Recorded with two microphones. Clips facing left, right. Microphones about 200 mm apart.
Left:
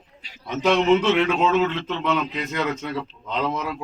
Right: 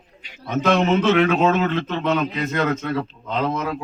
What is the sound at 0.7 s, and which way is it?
A man's voice, 50° right (ahead or behind).